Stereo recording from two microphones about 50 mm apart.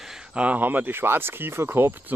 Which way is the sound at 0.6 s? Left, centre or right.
Right.